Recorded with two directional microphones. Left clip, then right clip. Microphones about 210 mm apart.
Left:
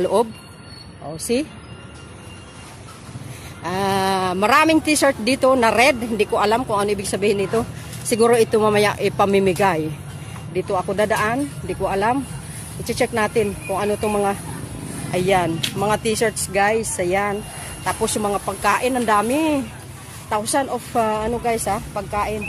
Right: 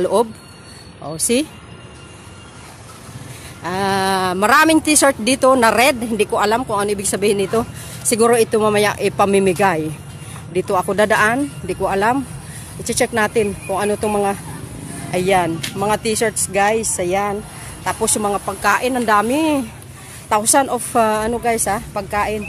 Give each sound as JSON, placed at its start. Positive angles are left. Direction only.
{"t": 0.0, "sound": "speech", "side_deg": -10}
{"t": 1.0, "sound": "a woman's voice", "side_deg": -25}
{"t": 3.6, "sound": "speech", "side_deg": -10}
{"t": 10.5, "sound": "a woman's voice", "side_deg": -25}